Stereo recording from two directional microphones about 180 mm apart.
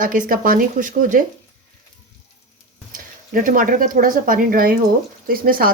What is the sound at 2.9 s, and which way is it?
Speech, 50° right (ahead or behind).